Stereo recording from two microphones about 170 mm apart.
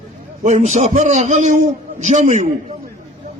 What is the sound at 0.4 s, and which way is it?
A man's voice, 40° right (ahead or behind).